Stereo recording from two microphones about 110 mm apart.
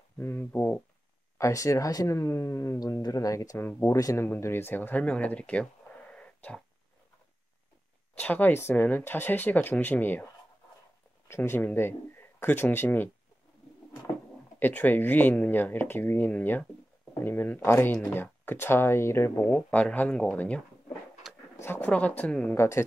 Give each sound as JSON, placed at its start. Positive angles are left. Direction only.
{"t": 0.2, "sound": "speech", "side_deg": 20}
{"t": 8.1, "sound": "speech", "side_deg": 15}
{"t": 11.2, "sound": "speech", "side_deg": 25}
{"t": 14.6, "sound": "speech", "side_deg": 15}
{"t": 21.2, "sound": "a sound", "side_deg": 0}
{"t": 21.5, "sound": "speech", "side_deg": 20}
{"t": 22.6, "sound": "speech", "side_deg": 25}